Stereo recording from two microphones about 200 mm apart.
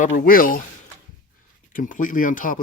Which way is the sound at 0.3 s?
45° left (ahead or behind).